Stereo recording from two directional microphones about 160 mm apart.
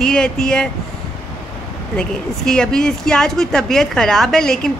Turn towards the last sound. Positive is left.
turn(degrees=5)  # may be behind; listen again after turning